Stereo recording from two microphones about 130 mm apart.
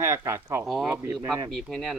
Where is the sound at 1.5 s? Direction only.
Centre (ahead or behind).